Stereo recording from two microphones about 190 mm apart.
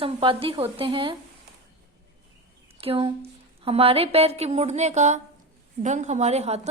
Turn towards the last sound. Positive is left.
turn(degrees=-35)  # may be behind; listen again after turning